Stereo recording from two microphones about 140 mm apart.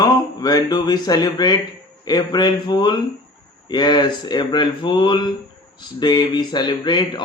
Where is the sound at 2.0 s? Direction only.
30° left (ahead or behind).